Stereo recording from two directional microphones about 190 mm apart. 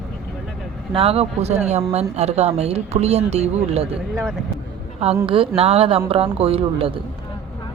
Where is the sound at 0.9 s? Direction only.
30° right (ahead or behind).